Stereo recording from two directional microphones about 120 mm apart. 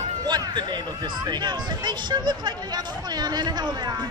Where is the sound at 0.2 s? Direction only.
40° right (ahead or behind).